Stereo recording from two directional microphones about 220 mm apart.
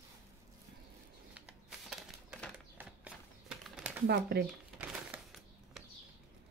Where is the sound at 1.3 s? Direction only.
5° right (ahead or behind).